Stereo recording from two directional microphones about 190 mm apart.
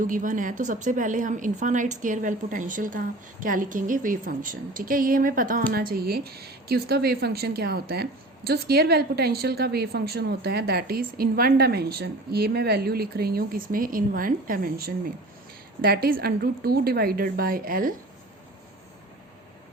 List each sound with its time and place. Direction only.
0.0 s a woman's voice: 45° right (ahead or behind)